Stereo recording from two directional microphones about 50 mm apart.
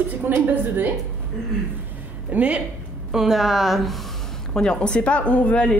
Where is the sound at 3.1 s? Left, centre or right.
Centre.